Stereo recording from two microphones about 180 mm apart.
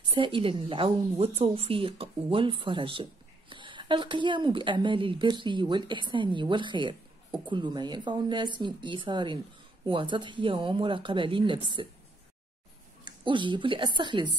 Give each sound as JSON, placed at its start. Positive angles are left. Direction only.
{"t": 0.1, "sound": "a woman's voice", "side_deg": -30}
{"t": 13.0, "sound": "speech", "side_deg": -25}